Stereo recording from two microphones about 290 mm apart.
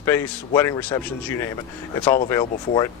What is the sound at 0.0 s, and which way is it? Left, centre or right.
A man's voice, centre.